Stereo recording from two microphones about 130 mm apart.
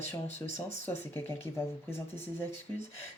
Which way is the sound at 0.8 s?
15° left (ahead or behind).